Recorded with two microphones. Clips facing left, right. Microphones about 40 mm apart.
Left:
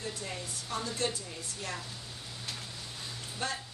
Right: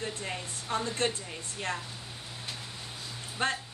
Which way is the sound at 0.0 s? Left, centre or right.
Right.